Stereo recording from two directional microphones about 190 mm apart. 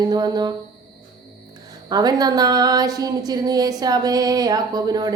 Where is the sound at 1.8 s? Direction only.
20° right (ahead or behind).